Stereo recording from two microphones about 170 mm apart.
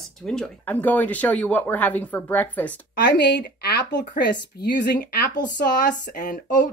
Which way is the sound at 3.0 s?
85° left.